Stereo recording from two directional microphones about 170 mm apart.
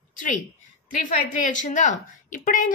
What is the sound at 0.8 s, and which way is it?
A woman's voice, 50° left (ahead or behind).